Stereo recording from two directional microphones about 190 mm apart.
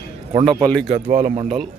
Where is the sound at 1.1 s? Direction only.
40° right (ahead or behind).